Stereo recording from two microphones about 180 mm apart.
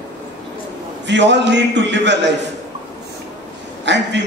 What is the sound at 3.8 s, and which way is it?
Speech, 75° right (ahead or behind).